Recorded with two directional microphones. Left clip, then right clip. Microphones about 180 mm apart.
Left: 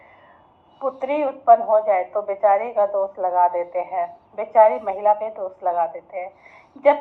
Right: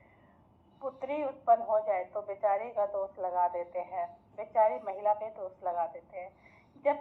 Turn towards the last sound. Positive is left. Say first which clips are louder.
# left 14 dB
turn(degrees=35)  # may be behind; listen again after turning